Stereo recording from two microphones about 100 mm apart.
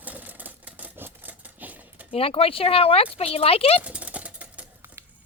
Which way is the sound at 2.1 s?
75° left (ahead or behind).